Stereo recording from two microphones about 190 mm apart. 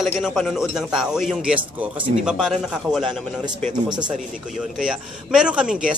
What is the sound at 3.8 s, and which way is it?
Speech, 20° right (ahead or behind).